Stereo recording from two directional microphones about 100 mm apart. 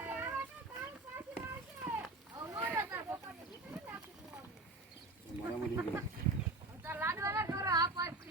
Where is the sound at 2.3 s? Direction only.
25° right (ahead or behind).